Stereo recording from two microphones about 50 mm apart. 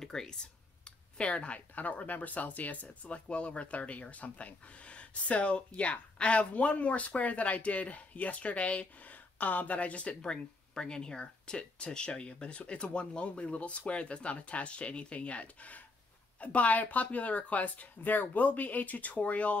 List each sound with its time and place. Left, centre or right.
0.0 s speech: centre; by 19.6 s left